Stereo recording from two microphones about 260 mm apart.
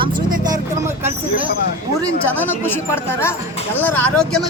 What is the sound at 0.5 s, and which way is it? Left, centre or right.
Speech, centre.